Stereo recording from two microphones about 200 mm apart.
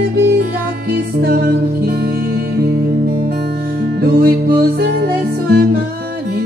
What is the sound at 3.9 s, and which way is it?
Music, 50° right (ahead or behind).